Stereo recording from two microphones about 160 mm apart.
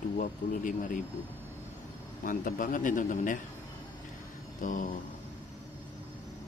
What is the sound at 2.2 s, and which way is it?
Speech, 55° left (ahead or behind).